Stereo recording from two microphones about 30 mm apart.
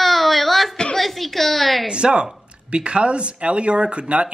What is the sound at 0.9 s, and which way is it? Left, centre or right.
Speech, centre.